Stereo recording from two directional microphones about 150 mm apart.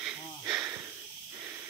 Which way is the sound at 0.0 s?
10° right (ahead or behind).